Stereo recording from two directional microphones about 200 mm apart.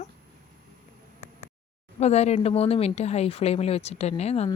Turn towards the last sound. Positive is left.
turn(degrees=30)  # may be behind; listen again after turning